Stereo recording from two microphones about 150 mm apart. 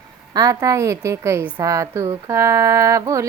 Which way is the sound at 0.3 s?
25° right (ahead or behind).